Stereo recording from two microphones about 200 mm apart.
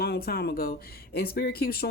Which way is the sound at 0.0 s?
50° left (ahead or behind).